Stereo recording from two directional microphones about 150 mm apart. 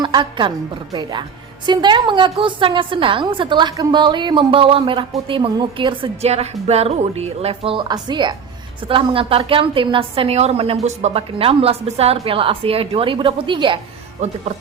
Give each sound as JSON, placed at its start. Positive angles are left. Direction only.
{"t": 0.0, "sound": "a woman's voice", "side_deg": -30}
{"t": 1.6, "sound": "a woman's voice", "side_deg": -30}
{"t": 14.2, "sound": "speech", "side_deg": -50}